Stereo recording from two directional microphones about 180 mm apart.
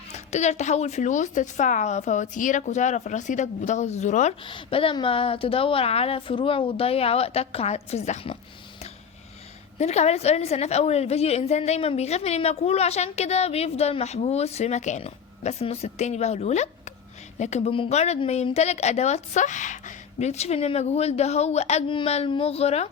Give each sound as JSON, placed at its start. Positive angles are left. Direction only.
{"t": 0.1, "sound": "a woman's voice", "side_deg": 40}
{"t": 4.4, "sound": "a woman's voice", "side_deg": 30}
{"t": 9.7, "sound": "a woman's voice", "side_deg": 40}